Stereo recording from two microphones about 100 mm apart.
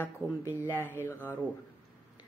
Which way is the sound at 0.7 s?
20° left (ahead or behind).